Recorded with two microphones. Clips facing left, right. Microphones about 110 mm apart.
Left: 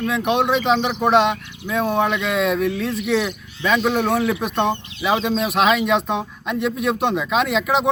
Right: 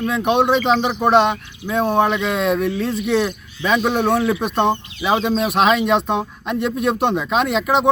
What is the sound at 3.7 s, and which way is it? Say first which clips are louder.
Speech: right 2 dB; 15° right (ahead or behind).